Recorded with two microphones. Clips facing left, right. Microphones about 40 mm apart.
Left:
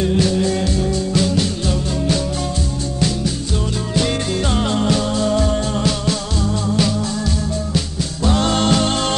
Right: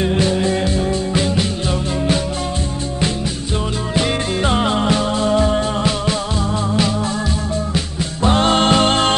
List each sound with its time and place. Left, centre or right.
0.0 s music: right
3.9 s music: right
8.3 s music: right